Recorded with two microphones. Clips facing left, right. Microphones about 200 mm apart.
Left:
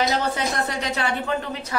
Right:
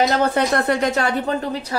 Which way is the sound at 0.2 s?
60° right (ahead or behind).